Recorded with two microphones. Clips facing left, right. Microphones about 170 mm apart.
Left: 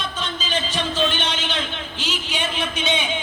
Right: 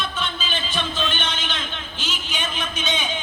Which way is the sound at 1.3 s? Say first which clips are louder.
Left 4 dB; 80° left.